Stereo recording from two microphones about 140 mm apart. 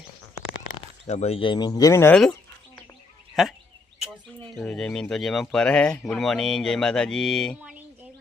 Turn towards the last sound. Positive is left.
turn(degrees=5)  # may be behind; listen again after turning